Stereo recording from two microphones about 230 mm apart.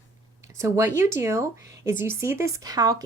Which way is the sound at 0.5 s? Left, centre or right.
Centre.